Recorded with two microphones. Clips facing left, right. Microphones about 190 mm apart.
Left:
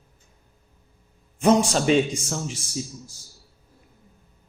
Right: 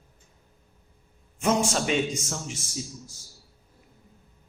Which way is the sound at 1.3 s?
35° left (ahead or behind).